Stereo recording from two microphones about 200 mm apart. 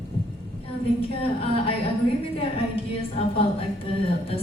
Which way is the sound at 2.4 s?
30° left (ahead or behind).